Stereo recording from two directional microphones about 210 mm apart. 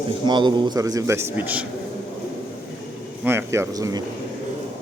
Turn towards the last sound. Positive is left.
turn(degrees=-15)  # may be behind; listen again after turning